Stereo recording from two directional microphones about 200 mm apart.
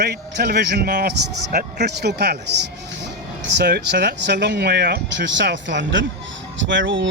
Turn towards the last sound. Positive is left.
turn(degrees=-65)  # may be behind; listen again after turning